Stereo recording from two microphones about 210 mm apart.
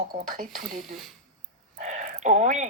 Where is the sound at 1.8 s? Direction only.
35° right (ahead or behind).